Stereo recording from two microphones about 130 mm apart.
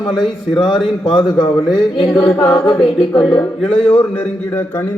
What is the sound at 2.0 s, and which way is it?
Chant, 5° left (ahead or behind).